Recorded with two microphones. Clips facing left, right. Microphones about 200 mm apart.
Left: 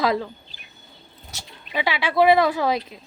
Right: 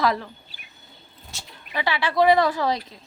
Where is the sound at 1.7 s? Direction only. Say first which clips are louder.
Left 1 dB; 15° left (ahead or behind).